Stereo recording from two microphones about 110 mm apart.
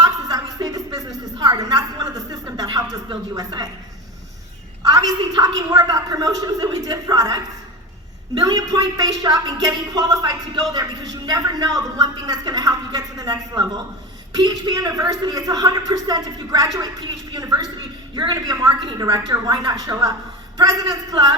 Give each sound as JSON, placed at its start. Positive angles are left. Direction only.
{"t": 0.0, "sound": "a sound", "side_deg": -35}
{"t": 3.3, "sound": "a woman's voice", "side_deg": -35}
{"t": 4.9, "sound": "a woman's voice", "side_deg": -35}
{"t": 17.7, "sound": "a woman's voice", "side_deg": -50}